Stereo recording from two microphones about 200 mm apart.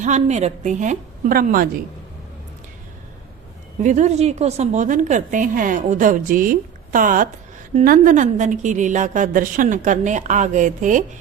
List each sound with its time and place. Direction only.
0.0 s a woman's voice: 35° right (ahead or behind)
3.8 s a woman's voice: 35° right (ahead or behind)